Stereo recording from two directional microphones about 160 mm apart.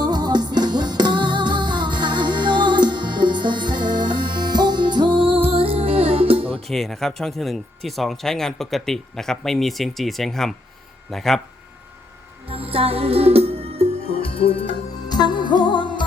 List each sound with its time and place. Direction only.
0.0 s music: 25° right (ahead or behind)
6.7 s speech: centre (ahead or behind)
12.5 s music: 35° right (ahead or behind)
14.0 s music: 40° left (ahead or behind)